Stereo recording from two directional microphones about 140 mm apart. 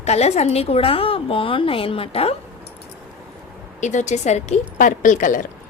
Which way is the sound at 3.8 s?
60° left (ahead or behind).